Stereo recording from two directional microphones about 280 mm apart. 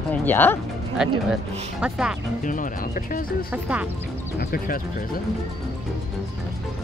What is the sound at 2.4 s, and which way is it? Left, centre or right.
Speech, left.